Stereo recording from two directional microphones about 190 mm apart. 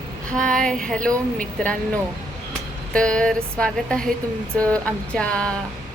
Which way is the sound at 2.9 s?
5° left (ahead or behind).